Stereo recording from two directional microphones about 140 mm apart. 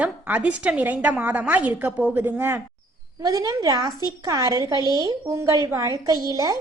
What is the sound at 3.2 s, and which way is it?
Speech, 25° right (ahead or behind).